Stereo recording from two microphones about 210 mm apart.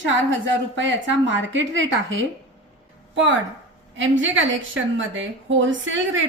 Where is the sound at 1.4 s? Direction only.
65° right (ahead or behind).